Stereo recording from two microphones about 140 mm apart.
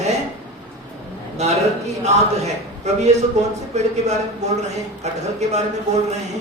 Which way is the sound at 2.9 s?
55° right (ahead or behind).